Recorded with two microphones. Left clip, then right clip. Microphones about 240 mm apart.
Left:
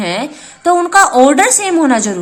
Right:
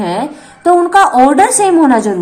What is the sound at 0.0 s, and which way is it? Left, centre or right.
Speech, left.